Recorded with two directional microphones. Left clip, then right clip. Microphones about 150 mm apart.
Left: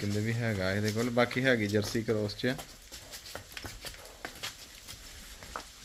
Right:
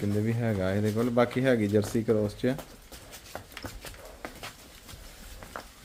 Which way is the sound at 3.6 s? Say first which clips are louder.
Right 3 dB; 20° right (ahead or behind).